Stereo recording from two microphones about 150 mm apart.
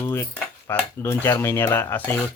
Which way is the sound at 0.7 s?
15° left (ahead or behind).